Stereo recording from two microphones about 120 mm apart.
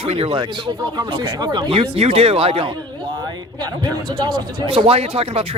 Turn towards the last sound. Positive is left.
turn(degrees=-50)  # may be behind; listen again after turning